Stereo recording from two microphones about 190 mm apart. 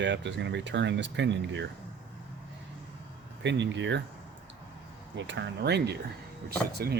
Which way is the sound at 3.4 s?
70° right (ahead or behind).